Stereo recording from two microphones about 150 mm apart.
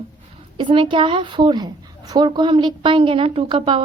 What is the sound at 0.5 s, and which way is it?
A woman's voice, 35° right (ahead or behind).